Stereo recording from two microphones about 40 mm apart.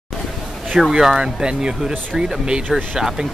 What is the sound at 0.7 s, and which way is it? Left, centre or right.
Speech, centre.